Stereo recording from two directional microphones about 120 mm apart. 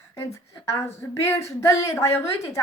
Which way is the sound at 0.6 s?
25° left (ahead or behind).